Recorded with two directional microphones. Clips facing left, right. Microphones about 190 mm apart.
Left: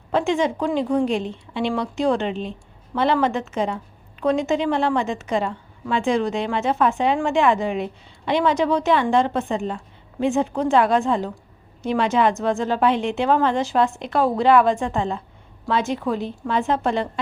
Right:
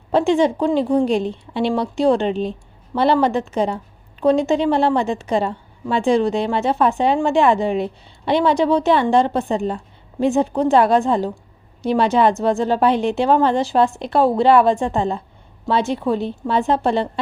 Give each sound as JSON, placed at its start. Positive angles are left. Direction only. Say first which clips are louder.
{"t": 0.1, "sound": "a woman's voice", "louder": "right 5 dB", "side_deg": -35}